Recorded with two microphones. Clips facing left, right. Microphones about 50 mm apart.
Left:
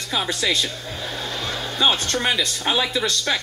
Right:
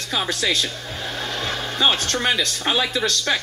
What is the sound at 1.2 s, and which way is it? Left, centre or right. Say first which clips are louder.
Music: right 3 dB; right.